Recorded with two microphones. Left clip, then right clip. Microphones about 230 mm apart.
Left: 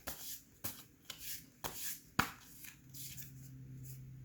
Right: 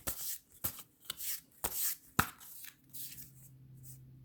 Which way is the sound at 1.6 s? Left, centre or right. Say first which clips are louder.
Right 4 dB; right.